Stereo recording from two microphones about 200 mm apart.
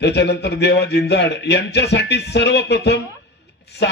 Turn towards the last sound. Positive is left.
turn(degrees=55)  # may be behind; listen again after turning